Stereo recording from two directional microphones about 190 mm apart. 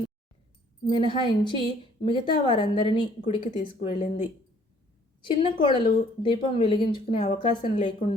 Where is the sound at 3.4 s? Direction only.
40° left (ahead or behind).